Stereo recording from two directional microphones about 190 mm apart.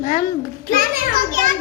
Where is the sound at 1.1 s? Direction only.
45° right (ahead or behind).